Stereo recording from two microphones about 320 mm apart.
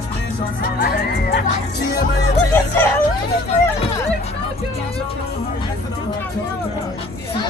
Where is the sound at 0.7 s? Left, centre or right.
Left.